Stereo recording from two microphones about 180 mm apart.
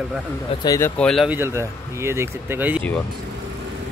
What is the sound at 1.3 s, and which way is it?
Speech, 15° right (ahead or behind).